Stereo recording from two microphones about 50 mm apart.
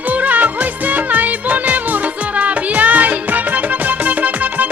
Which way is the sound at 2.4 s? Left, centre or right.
Right.